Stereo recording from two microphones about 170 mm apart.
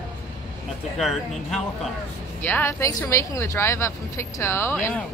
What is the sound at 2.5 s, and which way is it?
Speech, 15° left (ahead or behind).